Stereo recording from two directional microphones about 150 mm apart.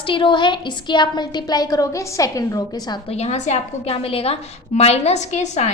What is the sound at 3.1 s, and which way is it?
A woman's voice, 45° left (ahead or behind).